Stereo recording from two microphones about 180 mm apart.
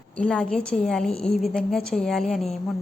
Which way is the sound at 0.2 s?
5° left (ahead or behind).